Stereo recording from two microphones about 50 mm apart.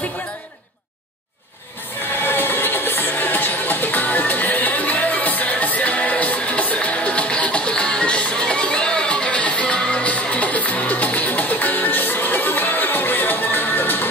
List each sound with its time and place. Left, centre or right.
2.2 s music: left